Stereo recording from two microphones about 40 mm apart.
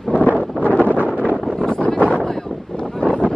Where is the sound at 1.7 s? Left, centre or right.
Left.